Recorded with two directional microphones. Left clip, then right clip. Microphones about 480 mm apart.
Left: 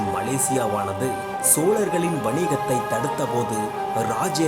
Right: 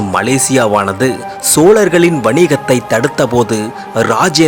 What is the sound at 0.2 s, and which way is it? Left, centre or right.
Speech, left.